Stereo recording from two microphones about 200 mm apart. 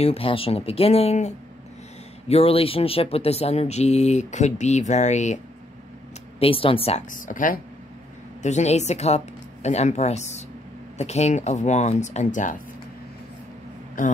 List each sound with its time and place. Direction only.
0.0 s speech: 30° left (ahead or behind)
6.4 s a woman's voice: 25° left (ahead or behind)
14.0 s speech: 40° left (ahead or behind)